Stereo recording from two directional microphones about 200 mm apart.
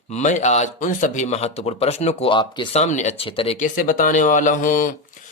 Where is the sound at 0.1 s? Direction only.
35° left (ahead or behind).